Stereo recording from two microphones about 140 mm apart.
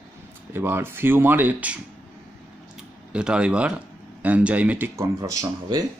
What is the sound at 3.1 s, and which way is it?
Speech, 5° right (ahead or behind).